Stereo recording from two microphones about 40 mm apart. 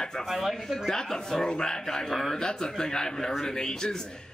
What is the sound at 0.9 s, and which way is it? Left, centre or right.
Speech, centre.